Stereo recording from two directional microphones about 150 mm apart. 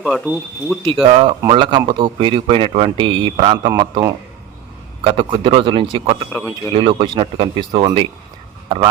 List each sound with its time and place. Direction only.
0.0 s speech: 5° right (ahead or behind)
1.1 s a man's voice: 35° right (ahead or behind)